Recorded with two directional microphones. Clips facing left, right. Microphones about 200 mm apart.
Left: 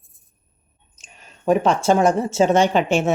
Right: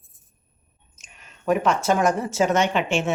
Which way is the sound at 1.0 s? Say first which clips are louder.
Left 3 dB; 35° left (ahead or behind).